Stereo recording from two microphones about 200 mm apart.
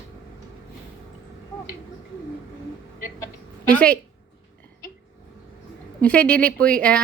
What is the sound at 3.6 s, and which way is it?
Speech, 5° left (ahead or behind).